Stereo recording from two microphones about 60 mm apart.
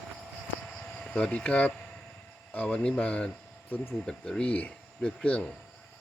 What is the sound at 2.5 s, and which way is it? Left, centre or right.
Speech, left.